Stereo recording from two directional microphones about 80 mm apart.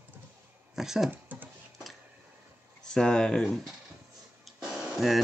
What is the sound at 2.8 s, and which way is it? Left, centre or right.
Speech, centre.